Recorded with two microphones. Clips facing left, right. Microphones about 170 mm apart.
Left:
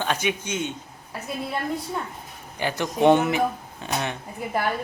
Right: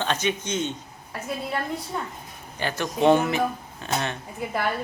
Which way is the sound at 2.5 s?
15° left (ahead or behind).